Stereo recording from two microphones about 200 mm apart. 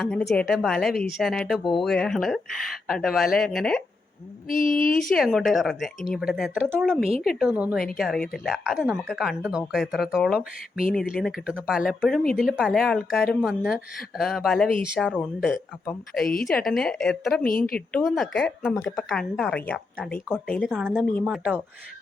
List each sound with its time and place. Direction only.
0.0 s speech: 5° left (ahead or behind)
4.4 s speech: 45° left (ahead or behind)
5.1 s speech: centre (ahead or behind)
16.5 s speech: centre (ahead or behind)